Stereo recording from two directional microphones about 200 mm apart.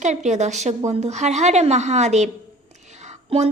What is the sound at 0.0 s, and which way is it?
Speech, 35° right (ahead or behind).